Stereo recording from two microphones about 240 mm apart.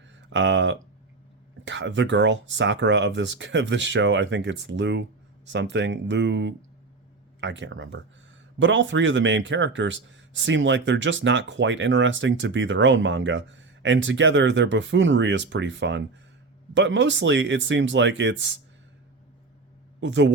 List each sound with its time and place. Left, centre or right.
0.2 s speech: right
20.0 s speech: right